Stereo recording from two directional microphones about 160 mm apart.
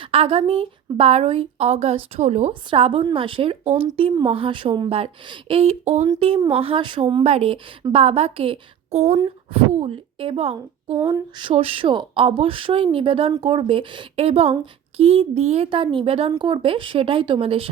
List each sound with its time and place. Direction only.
0.0 s a woman's voice: 35° right (ahead or behind)
2.5 s a woman's voice: 35° right (ahead or behind)
10.9 s a sound: 15° right (ahead or behind)
11.3 s a woman's voice: 35° right (ahead or behind)